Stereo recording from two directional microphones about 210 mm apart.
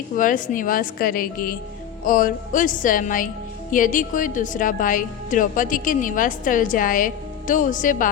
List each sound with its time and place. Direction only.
0.2 s a woman's voice: 40° left (ahead or behind)